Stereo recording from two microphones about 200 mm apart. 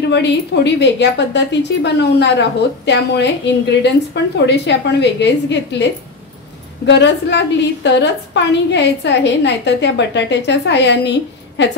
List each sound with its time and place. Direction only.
0.1 s a woman's voice: 60° left (ahead or behind)
6.9 s a woman's voice: 60° left (ahead or behind)